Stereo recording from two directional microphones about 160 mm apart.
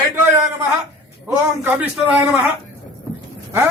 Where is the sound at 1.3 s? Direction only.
10° right (ahead or behind).